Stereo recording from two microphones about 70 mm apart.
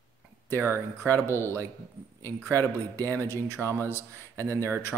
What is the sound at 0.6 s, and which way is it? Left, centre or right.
Speech, right.